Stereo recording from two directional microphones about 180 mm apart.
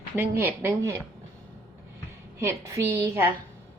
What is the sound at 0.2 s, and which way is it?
Speech, 10° right (ahead or behind).